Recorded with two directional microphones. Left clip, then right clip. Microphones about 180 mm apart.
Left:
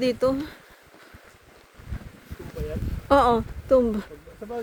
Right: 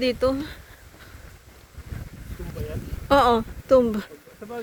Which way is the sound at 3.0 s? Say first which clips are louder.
Right 1 dB; 10° left (ahead or behind).